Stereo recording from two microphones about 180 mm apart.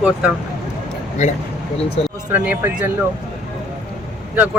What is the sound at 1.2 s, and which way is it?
Speech, 40° left (ahead or behind).